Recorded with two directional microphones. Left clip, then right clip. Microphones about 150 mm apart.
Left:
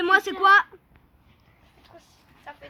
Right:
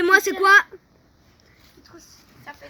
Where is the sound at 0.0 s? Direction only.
20° right (ahead or behind).